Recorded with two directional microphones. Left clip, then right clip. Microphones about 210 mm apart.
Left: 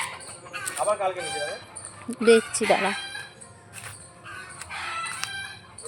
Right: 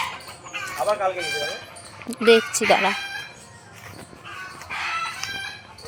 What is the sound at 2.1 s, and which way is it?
Speech, 15° left (ahead or behind).